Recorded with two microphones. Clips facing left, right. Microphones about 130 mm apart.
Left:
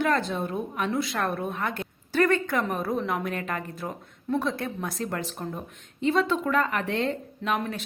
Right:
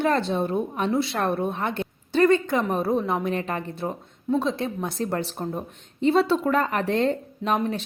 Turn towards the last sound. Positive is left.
turn(degrees=-35)  # may be behind; listen again after turning